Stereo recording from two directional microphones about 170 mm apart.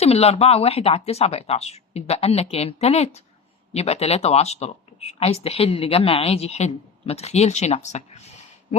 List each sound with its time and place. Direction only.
0.0 s speech: 35° left (ahead or behind)